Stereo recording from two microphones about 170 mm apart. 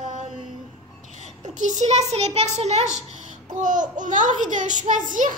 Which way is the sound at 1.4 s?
45° right (ahead or behind).